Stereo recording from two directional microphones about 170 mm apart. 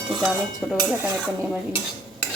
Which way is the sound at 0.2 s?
Centre (ahead or behind).